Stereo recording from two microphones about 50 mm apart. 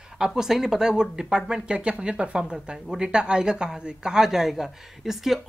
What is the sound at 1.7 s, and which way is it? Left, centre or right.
Speech, right.